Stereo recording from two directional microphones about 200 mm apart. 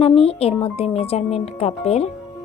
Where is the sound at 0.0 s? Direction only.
30° left (ahead or behind).